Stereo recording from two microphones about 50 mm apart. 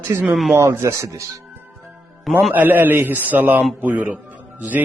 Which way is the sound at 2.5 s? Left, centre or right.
Right.